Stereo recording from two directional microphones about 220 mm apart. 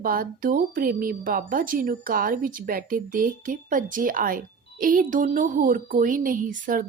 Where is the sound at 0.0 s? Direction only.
40° right (ahead or behind).